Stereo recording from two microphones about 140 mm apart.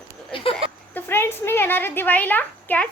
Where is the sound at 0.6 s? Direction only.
40° right (ahead or behind).